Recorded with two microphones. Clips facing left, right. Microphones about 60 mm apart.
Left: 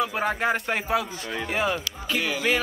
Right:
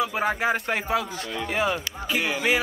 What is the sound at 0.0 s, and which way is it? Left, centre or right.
Speech, centre.